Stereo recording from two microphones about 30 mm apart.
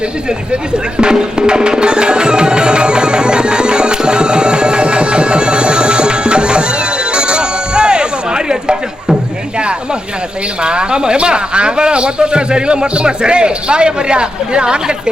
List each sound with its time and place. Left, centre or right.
1.0 s music: right
10.6 s a man's voice: right